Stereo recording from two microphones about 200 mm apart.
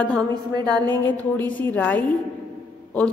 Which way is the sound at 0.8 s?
10° left (ahead or behind).